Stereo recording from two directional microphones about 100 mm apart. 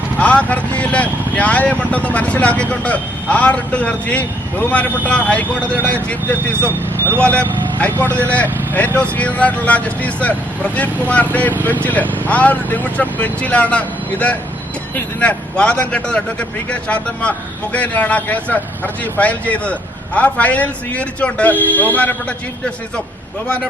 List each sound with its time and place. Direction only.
0.2 s speech: 15° left (ahead or behind)
7.8 s speech: 20° left (ahead or behind)